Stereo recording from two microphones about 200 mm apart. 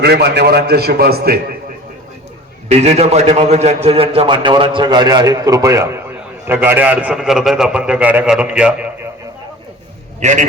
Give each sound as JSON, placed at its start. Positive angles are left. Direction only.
{"t": 0.0, "sound": "a man's voice", "side_deg": -55}
{"t": 2.6, "sound": "a man's voice", "side_deg": -30}
{"t": 10.2, "sound": "a man's voice", "side_deg": -35}